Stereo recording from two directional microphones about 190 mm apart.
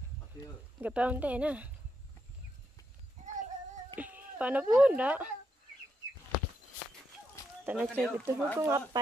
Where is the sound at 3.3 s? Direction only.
40° right (ahead or behind).